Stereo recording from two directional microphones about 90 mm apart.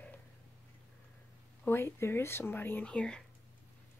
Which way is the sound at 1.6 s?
25° left (ahead or behind).